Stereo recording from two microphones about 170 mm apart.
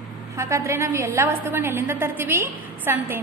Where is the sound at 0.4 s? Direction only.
15° right (ahead or behind).